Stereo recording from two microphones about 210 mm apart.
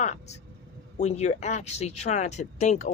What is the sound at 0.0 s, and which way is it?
Speech, 30° left (ahead or behind).